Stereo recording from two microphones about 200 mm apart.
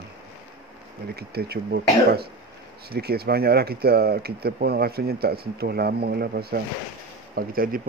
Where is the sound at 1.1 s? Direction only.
50° right (ahead or behind).